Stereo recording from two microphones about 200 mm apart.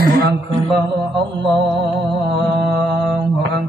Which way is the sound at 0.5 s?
25° right (ahead or behind).